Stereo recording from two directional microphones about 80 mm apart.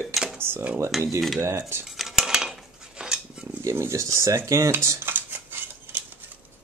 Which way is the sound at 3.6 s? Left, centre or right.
Right.